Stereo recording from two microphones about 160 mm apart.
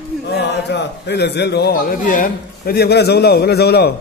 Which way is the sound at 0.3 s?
90° left.